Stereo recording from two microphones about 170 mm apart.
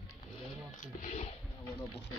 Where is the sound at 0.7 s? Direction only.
45° left (ahead or behind).